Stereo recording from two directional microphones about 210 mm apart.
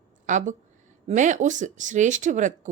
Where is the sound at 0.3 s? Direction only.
35° right (ahead or behind).